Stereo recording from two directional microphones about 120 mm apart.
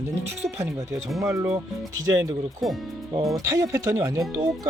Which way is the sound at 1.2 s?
25° right (ahead or behind).